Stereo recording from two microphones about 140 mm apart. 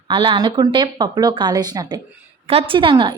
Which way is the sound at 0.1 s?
35° right (ahead or behind).